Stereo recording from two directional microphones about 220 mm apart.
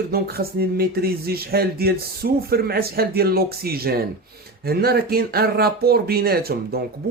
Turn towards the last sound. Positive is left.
turn(degrees=-45)  # may be behind; listen again after turning